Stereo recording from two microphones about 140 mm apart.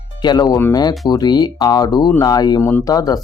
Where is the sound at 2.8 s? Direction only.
25° left (ahead or behind).